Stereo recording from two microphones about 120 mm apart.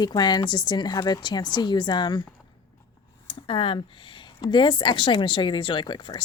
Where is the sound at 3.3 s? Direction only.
45° left (ahead or behind).